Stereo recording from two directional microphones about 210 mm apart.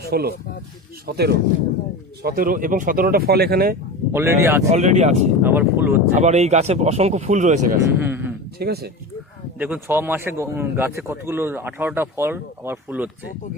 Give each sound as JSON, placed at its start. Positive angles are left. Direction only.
{"t": 0.0, "sound": "speech", "side_deg": -50}
{"t": 4.1, "sound": "speech", "side_deg": -10}
{"t": 4.7, "sound": "speech", "side_deg": -35}
{"t": 5.4, "sound": "speech", "side_deg": -10}
{"t": 6.1, "sound": "speech", "side_deg": -30}
{"t": 8.0, "sound": "speech", "side_deg": -10}
{"t": 8.5, "sound": "speech", "side_deg": -50}
{"t": 9.6, "sound": "speech", "side_deg": -5}